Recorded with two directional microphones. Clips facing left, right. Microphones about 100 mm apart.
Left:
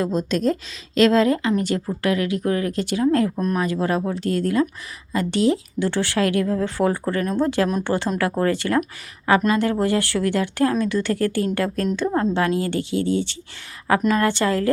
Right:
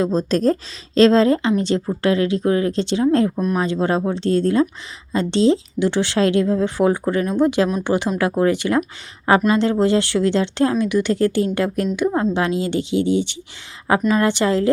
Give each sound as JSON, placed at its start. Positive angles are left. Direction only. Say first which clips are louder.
{"t": 0.0, "sound": "speech", "louder": "right 3 dB", "side_deg": -30}
{"t": 3.3, "sound": "speech", "louder": "right 2 dB", "side_deg": -5}
{"t": 3.6, "sound": "speech", "louder": "right 3 dB", "side_deg": -25}